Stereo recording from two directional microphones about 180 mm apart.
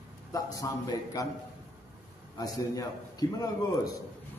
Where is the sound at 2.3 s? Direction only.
20° left (ahead or behind).